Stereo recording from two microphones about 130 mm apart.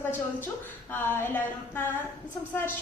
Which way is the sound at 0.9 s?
15° left (ahead or behind).